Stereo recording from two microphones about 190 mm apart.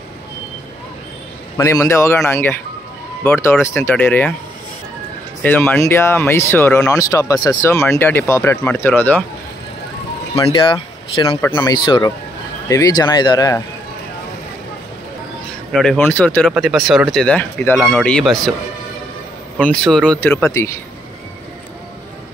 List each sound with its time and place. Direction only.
1.6 s speech: 15° left (ahead or behind)
5.4 s speech: 10° left (ahead or behind)
10.3 s speech: 25° left (ahead or behind)
15.7 s speech: centre (ahead or behind)
19.6 s speech: 5° left (ahead or behind)